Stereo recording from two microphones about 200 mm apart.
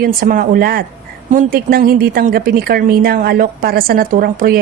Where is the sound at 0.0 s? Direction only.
45° right (ahead or behind).